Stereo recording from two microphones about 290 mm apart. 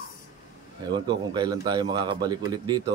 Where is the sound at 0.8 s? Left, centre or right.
Centre.